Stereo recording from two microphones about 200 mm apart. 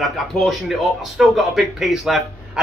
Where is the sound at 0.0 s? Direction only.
Centre (ahead or behind).